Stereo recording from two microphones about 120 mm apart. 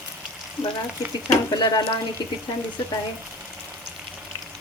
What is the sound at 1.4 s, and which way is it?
Speech, 35° left (ahead or behind).